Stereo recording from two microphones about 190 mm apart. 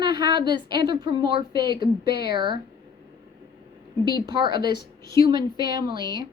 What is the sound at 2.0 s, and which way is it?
Speech, 55° left (ahead or behind).